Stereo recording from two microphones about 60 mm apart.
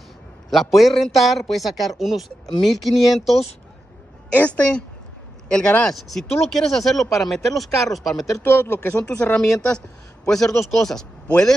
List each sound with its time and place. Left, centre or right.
0.5 s a man's voice: centre
4.3 s a woman's voice: left; by 8.4 s centre
8.5 s speech: left
8.9 s a man's voice: centre